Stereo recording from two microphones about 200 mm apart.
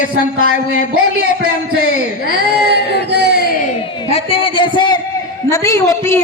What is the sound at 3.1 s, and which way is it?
Speech, 55° right (ahead or behind).